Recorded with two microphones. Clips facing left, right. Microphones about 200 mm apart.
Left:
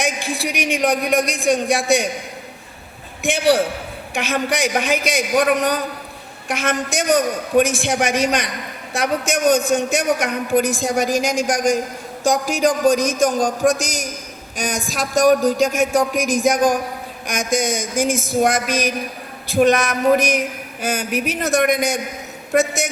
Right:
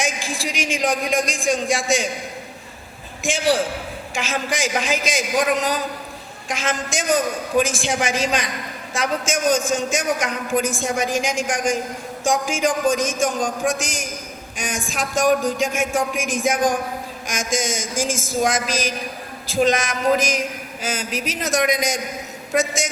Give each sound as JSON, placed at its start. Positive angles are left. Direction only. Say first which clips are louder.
{"t": 0.0, "sound": "a woman's voice", "louder": "left 3 dB", "side_deg": 60}
{"t": 3.2, "sound": "a woman's voice", "louder": "left 3 dB", "side_deg": 65}
{"t": 10.7, "sound": "speech", "louder": "left 4 dB", "side_deg": 35}
{"t": 17.2, "sound": "a woman's voice", "louder": "left 4 dB", "side_deg": 60}